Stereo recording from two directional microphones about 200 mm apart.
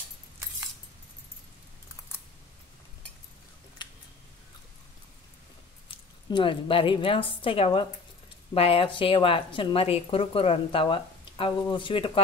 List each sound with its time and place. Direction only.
5.9 s a woman's voice: 25° left (ahead or behind)